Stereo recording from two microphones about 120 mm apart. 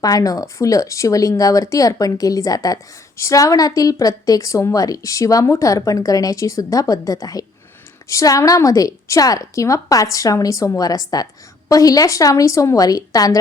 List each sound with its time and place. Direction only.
0.0 s speech: 30° left (ahead or behind)